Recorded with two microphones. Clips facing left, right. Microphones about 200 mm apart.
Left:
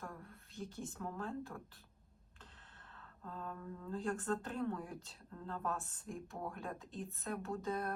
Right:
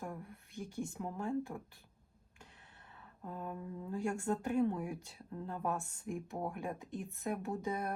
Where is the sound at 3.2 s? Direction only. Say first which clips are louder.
Right 3 dB; 15° right (ahead or behind).